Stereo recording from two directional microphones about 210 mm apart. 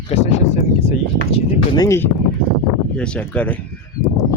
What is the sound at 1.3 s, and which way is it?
Speech, 20° left (ahead or behind).